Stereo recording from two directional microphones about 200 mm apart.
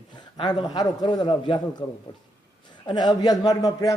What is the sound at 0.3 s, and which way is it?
A man's voice, 25° left (ahead or behind).